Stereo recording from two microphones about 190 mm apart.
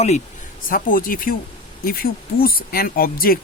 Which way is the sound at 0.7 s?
45° left (ahead or behind).